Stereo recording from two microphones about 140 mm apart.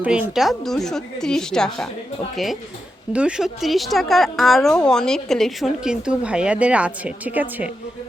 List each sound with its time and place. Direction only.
0.0 s speech: 10° right (ahead or behind)